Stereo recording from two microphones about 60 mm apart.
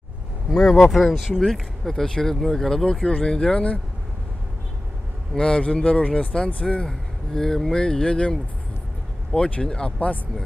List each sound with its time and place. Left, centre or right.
0.5 s speech: centre; by 3.8 s left
5.3 s speech: centre